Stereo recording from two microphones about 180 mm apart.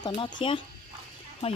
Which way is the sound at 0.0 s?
25° left (ahead or behind).